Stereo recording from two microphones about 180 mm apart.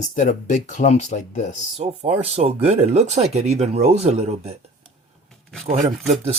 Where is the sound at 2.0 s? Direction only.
35° right (ahead or behind).